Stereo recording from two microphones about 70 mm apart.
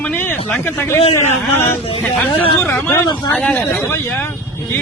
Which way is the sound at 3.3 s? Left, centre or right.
Centre.